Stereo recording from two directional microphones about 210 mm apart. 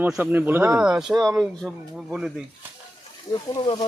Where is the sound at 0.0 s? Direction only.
10° right (ahead or behind).